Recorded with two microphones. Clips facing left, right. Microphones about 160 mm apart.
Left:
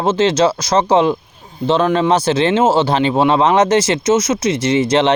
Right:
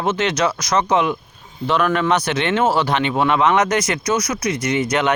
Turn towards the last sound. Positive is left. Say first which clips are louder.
# left 5 dB
turn(degrees=30)  # may be behind; listen again after turning